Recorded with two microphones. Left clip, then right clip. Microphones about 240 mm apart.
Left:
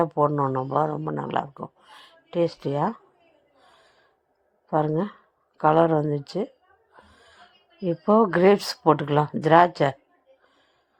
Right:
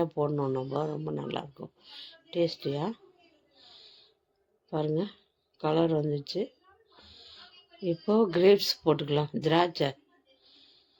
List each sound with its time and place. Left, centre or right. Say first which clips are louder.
0.0 s speech: left 8 dB; centre
3.8 s snort: right 4 dB; left
4.7 s speech: left 7 dB; centre
7.1 s music: right 3 dB; left
7.9 s speech: left 7 dB; centre